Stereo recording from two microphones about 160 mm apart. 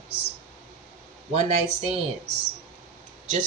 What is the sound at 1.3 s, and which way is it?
Speech, 40° right (ahead or behind).